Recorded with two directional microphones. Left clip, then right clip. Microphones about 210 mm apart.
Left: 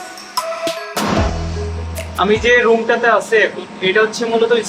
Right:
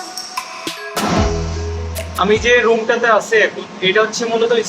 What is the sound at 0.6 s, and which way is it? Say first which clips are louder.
Music: left 3 dB; centre (ahead or behind).